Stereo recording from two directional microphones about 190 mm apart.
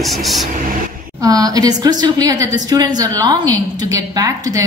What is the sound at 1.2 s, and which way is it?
A woman's voice, 20° right (ahead or behind).